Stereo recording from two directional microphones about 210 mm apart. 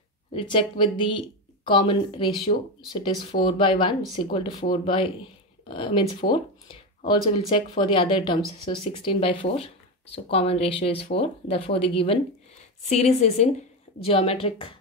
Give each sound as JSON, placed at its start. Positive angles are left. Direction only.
{"t": 0.3, "sound": "a woman's voice", "side_deg": 25}